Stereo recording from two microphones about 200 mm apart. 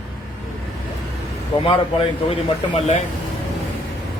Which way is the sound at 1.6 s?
25° left (ahead or behind).